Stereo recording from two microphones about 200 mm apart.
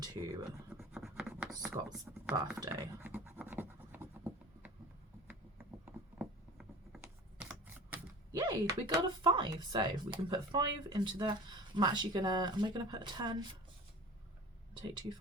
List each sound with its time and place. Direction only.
0.0 s speech: 15° right (ahead or behind)
0.9 s scratch: 5° right (ahead or behind)
2.6 s scratch: 15° right (ahead or behind)
5.8 s computer keyboard: 5° right (ahead or behind)
8.3 s speech: 20° right (ahead or behind)
14.7 s a sound: 20° right (ahead or behind)